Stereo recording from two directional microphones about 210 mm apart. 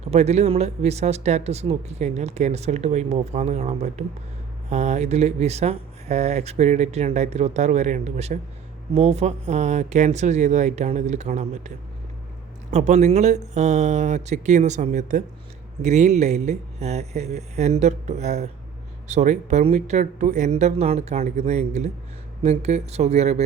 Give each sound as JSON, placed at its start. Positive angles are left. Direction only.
{"t": 0.1, "sound": "speech", "side_deg": -30}
{"t": 12.7, "sound": "speech", "side_deg": -30}